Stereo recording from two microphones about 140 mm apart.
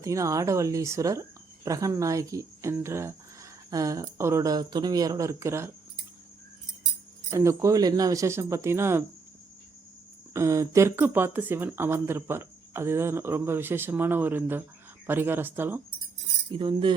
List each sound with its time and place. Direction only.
0.0 s speech: 25° right (ahead or behind)
7.3 s speech: 20° right (ahead or behind)
10.3 s speech: 20° right (ahead or behind)
16.5 s speech: 35° right (ahead or behind)